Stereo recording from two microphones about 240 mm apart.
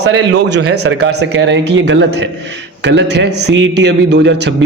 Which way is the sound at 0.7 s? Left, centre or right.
Right.